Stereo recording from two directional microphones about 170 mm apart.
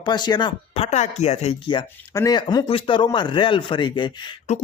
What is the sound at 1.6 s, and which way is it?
Speech, 30° left (ahead or behind).